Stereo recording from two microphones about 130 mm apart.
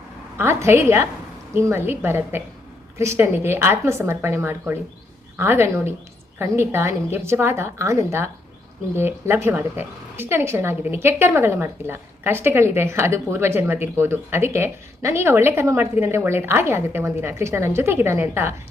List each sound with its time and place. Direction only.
0.3 s a woman's voice: 20° right (ahead or behind)